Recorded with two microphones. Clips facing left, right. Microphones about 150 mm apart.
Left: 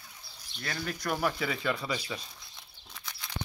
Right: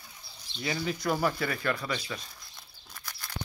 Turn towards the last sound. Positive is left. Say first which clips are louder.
# even
turn(degrees=0)  # may be behind; listen again after turning